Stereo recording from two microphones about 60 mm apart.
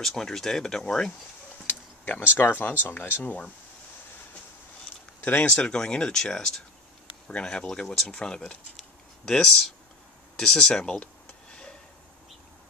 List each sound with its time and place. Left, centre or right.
0.0 s speech: centre
1.7 s speech: left
5.2 s speech: left
5.5 s speech: centre